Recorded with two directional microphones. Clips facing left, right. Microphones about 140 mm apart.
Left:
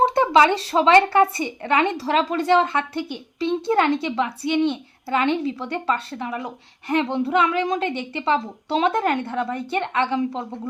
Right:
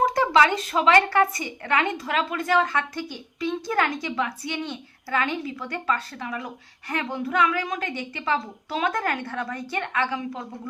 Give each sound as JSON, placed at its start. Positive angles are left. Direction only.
{"t": 0.0, "sound": "speech", "side_deg": 25}